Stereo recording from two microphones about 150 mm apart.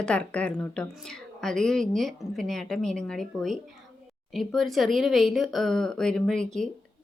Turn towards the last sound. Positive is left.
turn(degrees=5)  # may be behind; listen again after turning